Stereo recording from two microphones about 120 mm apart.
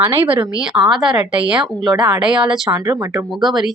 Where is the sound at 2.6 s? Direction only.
35° right (ahead or behind).